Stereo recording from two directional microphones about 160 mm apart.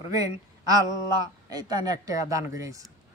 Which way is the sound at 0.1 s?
25° right (ahead or behind).